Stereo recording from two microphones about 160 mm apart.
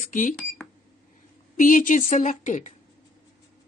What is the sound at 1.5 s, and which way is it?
A woman's voice, 55° left (ahead or behind).